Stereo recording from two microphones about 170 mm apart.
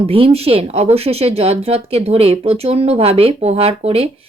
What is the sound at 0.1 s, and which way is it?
Speech, 35° right (ahead or behind).